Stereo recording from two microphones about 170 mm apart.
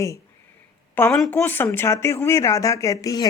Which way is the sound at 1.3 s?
10° left (ahead or behind).